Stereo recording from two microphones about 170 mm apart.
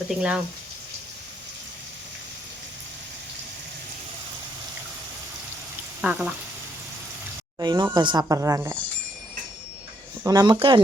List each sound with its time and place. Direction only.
0.1 s speech: 5° right (ahead or behind)
6.0 s speech: 5° right (ahead or behind)
7.6 s speech: 25° right (ahead or behind)
10.2 s speech: 25° right (ahead or behind)